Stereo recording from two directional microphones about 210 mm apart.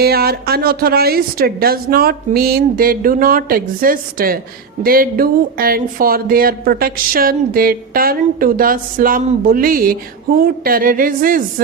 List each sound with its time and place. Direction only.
0.0 s speech: 50° right (ahead or behind)